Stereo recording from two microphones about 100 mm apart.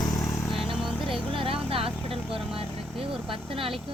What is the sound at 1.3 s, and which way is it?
Speech, 65° right (ahead or behind).